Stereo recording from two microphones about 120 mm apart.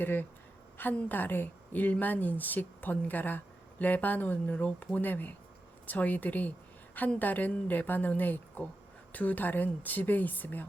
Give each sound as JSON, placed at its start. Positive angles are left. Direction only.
{"t": 0.0, "sound": "a woman's voice", "side_deg": 15}